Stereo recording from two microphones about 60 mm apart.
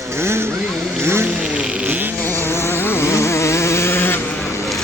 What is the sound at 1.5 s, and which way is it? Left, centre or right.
Vehicle, centre.